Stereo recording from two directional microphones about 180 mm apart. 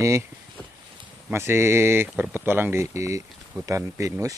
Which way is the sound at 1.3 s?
15° right (ahead or behind).